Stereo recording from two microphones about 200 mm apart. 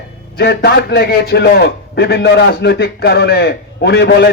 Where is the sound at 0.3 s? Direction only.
55° left (ahead or behind).